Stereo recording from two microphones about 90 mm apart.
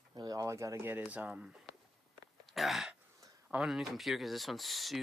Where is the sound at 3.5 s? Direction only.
Centre (ahead or behind).